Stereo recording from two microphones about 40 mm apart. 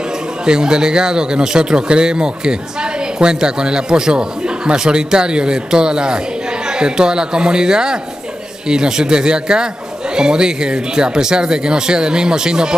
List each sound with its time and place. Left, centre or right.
0.5 s speech: centre